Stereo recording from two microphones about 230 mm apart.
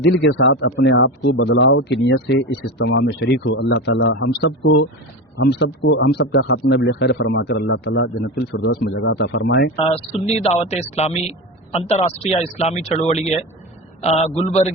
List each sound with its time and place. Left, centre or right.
0.0 s speech: left
9.7 s a man's voice: left